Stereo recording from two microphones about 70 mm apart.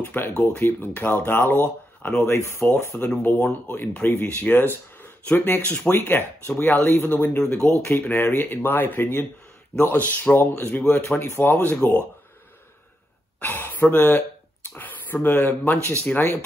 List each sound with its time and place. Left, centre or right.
0.0 s speech: left
2.2 s speech: left
3.2 s speech: left
7.6 s speech: left
11.1 s speech: left
13.4 s speech: left